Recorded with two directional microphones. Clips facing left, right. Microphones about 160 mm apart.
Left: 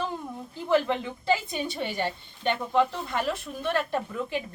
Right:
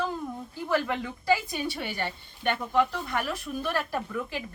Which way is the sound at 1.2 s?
20° left (ahead or behind).